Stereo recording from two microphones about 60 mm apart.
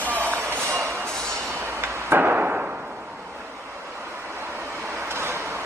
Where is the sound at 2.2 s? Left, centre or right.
Right.